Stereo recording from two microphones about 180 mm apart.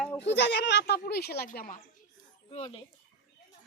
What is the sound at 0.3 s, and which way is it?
Speech, 70° left (ahead or behind).